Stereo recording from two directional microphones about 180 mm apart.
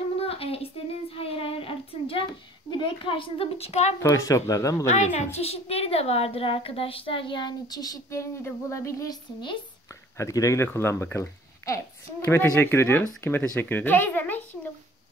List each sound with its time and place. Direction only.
0.2 s a sound: 35° left (ahead or behind)
1.1 s child singing: 30° left (ahead or behind)
2.7 s a woman's voice: 30° left (ahead or behind)
4.0 s speech: 15° left (ahead or behind)
4.8 s a woman's voice: 40° left (ahead or behind); by 14.4 s 10° left (ahead or behind)